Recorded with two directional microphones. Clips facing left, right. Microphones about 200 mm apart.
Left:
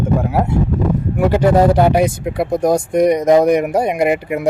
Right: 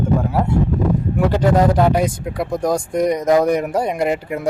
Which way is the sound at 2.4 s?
25° left (ahead or behind).